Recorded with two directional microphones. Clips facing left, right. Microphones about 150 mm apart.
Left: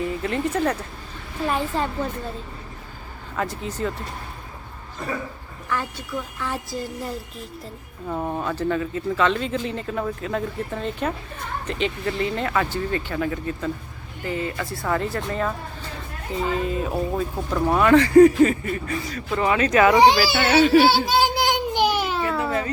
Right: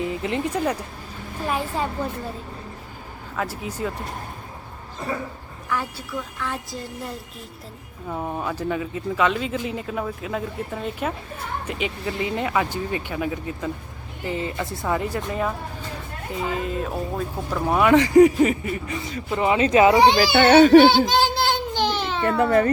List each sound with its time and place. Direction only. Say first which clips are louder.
0.0 s speech: even; 20° right (ahead or behind)
3.3 s speech: left 1 dB; 5° right (ahead or behind)
5.6 s speech: even; 10° right (ahead or behind)
6.1 s speech: left 1 dB; 5° left (ahead or behind)
17.9 s speech: left 2 dB; 20° right (ahead or behind)
20.2 s speech: right 5 dB; 45° right (ahead or behind)
21.1 s a sound: even; 15° left (ahead or behind)